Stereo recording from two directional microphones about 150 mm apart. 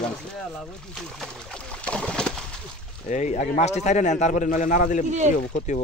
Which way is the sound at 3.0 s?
55° left (ahead or behind).